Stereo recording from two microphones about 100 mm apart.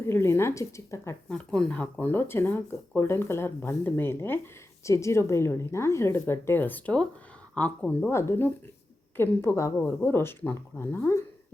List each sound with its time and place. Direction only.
0.0 s speech: 25° left (ahead or behind)
1.3 s speech: 10° left (ahead or behind)
8.1 s speech: 25° left (ahead or behind)